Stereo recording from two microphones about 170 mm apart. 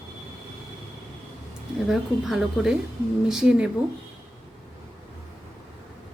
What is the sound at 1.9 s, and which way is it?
A woman's voice, centre (ahead or behind).